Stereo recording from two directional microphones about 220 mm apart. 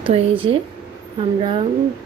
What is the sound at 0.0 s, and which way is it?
Speech, 25° right (ahead or behind).